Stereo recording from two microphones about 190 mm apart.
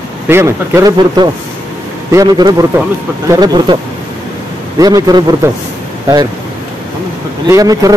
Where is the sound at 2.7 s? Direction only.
10° right (ahead or behind).